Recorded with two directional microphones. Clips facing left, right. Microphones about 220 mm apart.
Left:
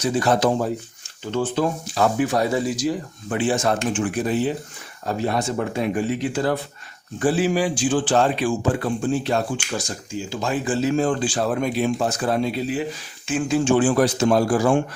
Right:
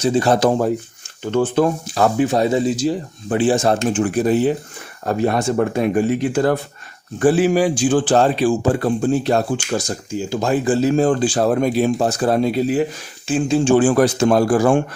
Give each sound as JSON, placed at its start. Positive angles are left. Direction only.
{"t": 0.0, "sound": "speech", "side_deg": -30}
{"t": 0.3, "sound": "a man's voice", "side_deg": -40}
{"t": 1.2, "sound": "speech", "side_deg": -55}
{"t": 2.1, "sound": "a man's voice", "side_deg": -25}
{"t": 5.0, "sound": "a man's voice", "side_deg": -55}
{"t": 13.2, "sound": "a man's voice", "side_deg": -30}
{"t": 13.7, "sound": "speech", "side_deg": -50}